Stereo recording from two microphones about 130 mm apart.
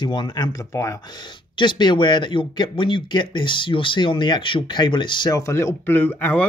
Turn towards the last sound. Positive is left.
turn(degrees=10)  # may be behind; listen again after turning